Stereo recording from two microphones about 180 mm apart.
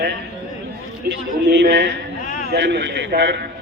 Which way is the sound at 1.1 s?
60° right (ahead or behind).